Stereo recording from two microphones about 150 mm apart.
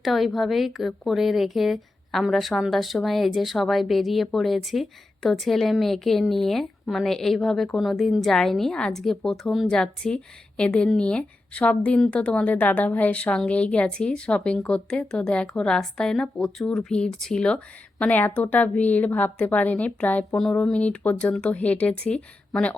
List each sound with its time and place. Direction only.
0.0 s a woman's voice: centre (ahead or behind)